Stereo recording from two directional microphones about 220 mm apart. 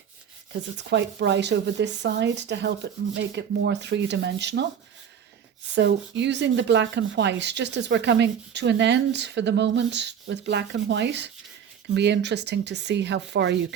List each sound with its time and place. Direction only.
0.9 s speech: 55° right (ahead or behind)
5.7 s speech: 50° right (ahead or behind)